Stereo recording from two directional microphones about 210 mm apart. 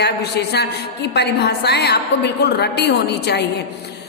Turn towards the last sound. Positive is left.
turn(degrees=50)  # may be behind; listen again after turning